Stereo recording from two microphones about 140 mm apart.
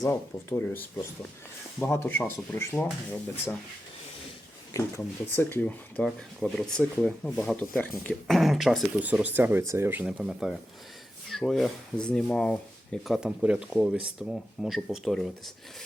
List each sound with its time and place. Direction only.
0.0 s speech: 20° left (ahead or behind)
1.9 s speech: 15° left (ahead or behind)
4.7 s speech: 20° left (ahead or behind); by 9.0 s centre (ahead or behind)
9.0 s speech: 10° right (ahead or behind); by 13.1 s 5° left (ahead or behind)
13.1 s speech: 5° right (ahead or behind)